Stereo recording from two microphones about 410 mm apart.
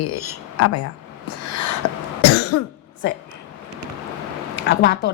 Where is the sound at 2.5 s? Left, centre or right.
Left.